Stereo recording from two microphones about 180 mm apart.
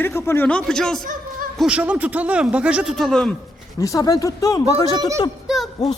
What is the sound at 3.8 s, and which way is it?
Speech, 20° left (ahead or behind).